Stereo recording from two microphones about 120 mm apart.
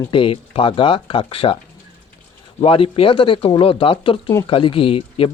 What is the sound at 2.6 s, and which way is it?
Speech, 50° left (ahead or behind).